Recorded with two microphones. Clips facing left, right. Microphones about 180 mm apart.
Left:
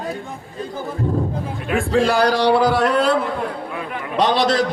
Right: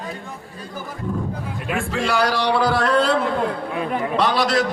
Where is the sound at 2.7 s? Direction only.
5° left (ahead or behind).